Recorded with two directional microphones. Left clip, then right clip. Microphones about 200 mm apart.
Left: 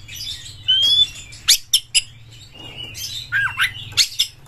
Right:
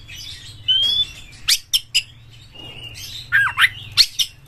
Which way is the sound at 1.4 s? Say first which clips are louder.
Left 2 dB; 20° left (ahead or behind).